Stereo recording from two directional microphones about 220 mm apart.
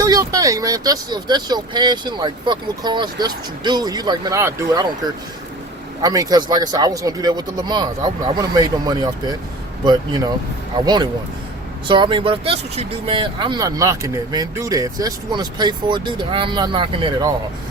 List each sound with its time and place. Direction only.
0.0 s speech: 15° right (ahead or behind)